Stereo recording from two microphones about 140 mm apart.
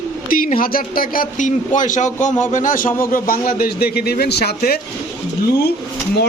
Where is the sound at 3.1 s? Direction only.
85° left.